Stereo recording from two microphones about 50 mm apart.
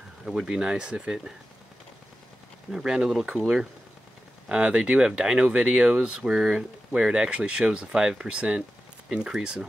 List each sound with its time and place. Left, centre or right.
0.2 s speech: centre
2.7 s speech: centre
4.5 s speech: right